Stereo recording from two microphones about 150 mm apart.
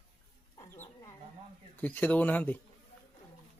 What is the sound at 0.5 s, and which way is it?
Dog, 20° left (ahead or behind).